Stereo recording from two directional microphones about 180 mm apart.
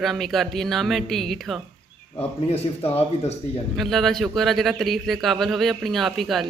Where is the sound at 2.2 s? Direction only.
35° left (ahead or behind).